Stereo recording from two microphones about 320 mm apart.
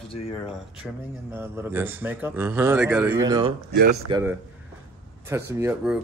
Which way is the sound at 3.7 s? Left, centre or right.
Right.